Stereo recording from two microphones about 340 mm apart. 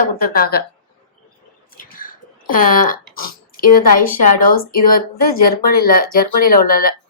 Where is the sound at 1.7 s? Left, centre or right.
Left.